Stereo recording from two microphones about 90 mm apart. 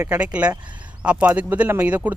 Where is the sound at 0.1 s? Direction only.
15° right (ahead or behind).